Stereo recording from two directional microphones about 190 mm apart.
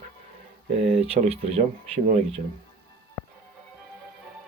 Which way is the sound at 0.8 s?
35° right (ahead or behind).